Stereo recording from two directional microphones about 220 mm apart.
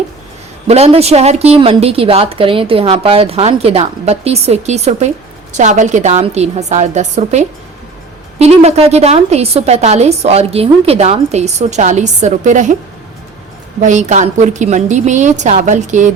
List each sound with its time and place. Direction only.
0.7 s a woman's voice: 30° right (ahead or behind)
13.8 s a woman's voice: 35° right (ahead or behind)